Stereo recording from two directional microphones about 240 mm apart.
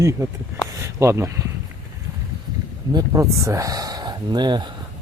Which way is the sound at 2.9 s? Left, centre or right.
Centre.